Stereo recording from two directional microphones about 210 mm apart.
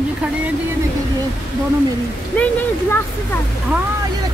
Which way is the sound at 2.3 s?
5° left (ahead or behind).